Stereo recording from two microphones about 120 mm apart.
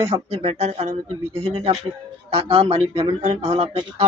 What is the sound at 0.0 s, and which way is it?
Speech, 60° right (ahead or behind).